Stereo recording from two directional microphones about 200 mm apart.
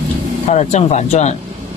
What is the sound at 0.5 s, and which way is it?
Speech, 35° left (ahead or behind).